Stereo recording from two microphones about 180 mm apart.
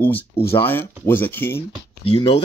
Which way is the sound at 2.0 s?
30° left (ahead or behind).